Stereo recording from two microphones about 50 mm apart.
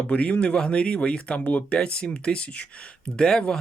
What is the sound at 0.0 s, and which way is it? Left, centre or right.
Speech, left.